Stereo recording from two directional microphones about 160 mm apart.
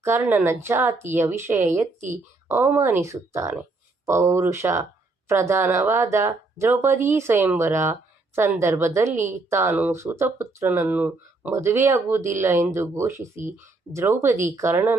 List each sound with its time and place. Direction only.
0.0 s speech: 15° right (ahead or behind)